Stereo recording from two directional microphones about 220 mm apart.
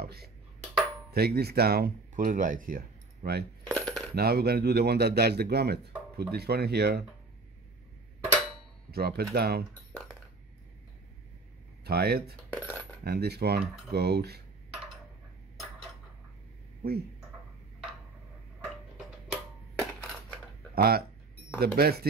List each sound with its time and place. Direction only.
0.0 s speech: 45° right (ahead or behind)
3.6 s coin: 5° left (ahead or behind)
4.1 s speech: 45° right (ahead or behind)
8.9 s speech: 45° right (ahead or behind)
11.8 s speech: 45° right (ahead or behind)
12.4 s coin: 5° left (ahead or behind)
13.0 s speech: 45° right (ahead or behind)
19.3 s a sound: 5° left (ahead or behind)
20.7 s speech: 45° right (ahead or behind)